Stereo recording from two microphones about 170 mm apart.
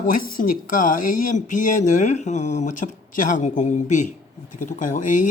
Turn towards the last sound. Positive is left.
turn(degrees=50)  # may be behind; listen again after turning